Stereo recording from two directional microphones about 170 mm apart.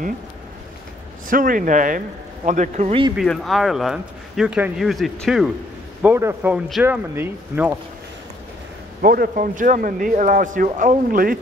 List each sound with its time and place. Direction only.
1.3 s speech: 55° right (ahead or behind)
2.9 s speech: 30° right (ahead or behind)
3.2 s speech: centre (ahead or behind)
6.0 s speech: 15° right (ahead or behind)
9.0 s speech: 60° right (ahead or behind)